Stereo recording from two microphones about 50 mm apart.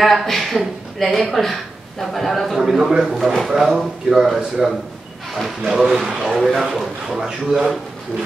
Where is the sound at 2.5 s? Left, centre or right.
Centre.